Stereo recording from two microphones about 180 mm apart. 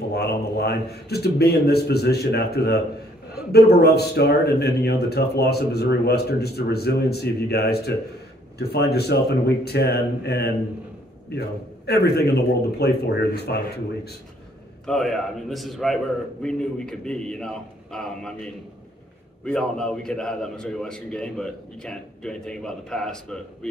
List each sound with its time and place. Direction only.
0.1 s speech: 65° left (ahead or behind)
14.9 s a man's voice: centre (ahead or behind)